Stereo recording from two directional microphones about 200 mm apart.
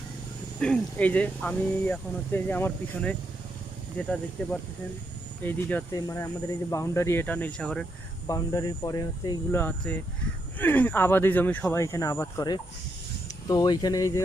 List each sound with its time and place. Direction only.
0.6 s speech: 5° left (ahead or behind)
8.3 s speech: 15° left (ahead or behind)